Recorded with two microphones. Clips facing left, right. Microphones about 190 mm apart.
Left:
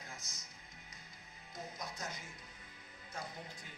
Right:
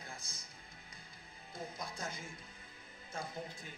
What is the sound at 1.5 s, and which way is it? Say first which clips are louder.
Music: right 2 dB; 30° right (ahead or behind).